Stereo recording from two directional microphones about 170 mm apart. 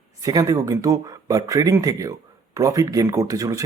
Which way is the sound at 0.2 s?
20° right (ahead or behind).